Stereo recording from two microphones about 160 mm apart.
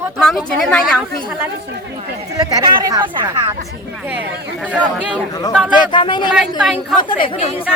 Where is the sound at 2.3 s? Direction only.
25° right (ahead or behind).